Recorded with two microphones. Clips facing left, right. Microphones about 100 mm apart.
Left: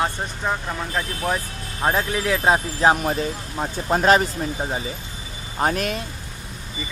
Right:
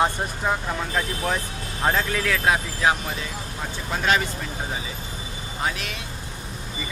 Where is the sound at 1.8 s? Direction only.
15° left (ahead or behind); by 6.0 s 45° left (ahead or behind).